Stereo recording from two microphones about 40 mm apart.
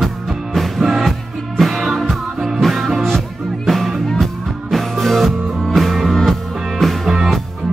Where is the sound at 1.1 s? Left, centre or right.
Centre.